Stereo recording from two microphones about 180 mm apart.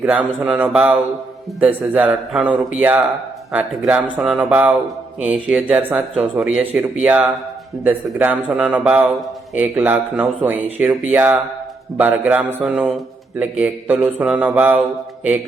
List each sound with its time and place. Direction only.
0.0 s speech: 10° right (ahead or behind)